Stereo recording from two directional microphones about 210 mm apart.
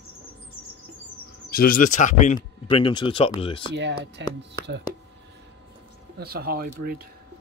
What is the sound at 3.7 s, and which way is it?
Speech, 55° right (ahead or behind).